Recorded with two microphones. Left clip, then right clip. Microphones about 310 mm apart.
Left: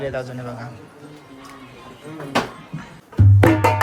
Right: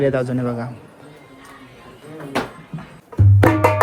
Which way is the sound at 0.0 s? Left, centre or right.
Right.